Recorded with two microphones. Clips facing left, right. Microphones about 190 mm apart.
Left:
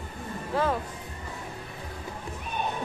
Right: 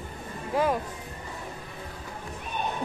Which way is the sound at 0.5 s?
15° right (ahead or behind).